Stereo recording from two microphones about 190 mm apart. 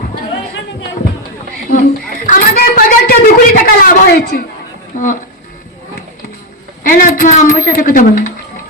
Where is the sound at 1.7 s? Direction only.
45° left (ahead or behind).